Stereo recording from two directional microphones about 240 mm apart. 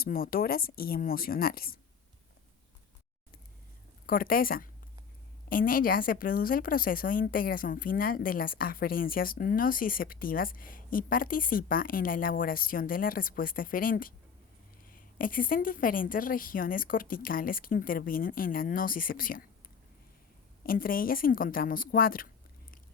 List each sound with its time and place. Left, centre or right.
0.0 s a woman's voice: left
4.0 s a woman's voice: left
20.7 s a woman's voice: left